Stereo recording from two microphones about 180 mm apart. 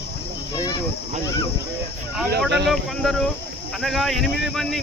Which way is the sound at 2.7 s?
Centre (ahead or behind).